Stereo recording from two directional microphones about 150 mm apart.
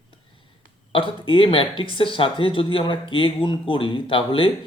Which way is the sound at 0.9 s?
35° left (ahead or behind).